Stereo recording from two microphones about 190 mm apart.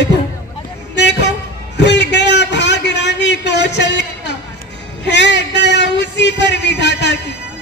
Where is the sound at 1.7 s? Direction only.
65° left (ahead or behind).